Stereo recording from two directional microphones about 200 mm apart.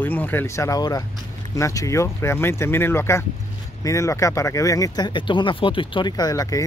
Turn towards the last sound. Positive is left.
turn(degrees=15)  # may be behind; listen again after turning